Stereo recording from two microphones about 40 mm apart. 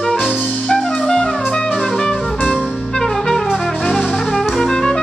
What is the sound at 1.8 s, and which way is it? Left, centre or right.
Music, centre.